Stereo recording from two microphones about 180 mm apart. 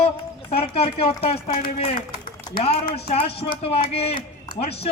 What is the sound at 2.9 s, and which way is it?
A man's voice, 30° left (ahead or behind).